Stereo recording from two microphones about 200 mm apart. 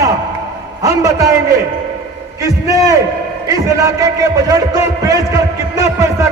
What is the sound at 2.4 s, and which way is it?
A man's voice, 15° right (ahead or behind).